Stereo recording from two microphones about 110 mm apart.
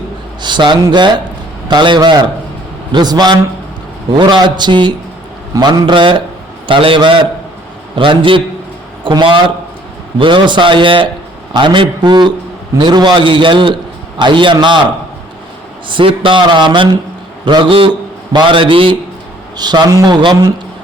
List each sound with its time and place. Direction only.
0.4 s a man's voice: 45° right (ahead or behind)
15.9 s a man's voice: 50° right (ahead or behind)
19.5 s a man's voice: 40° right (ahead or behind)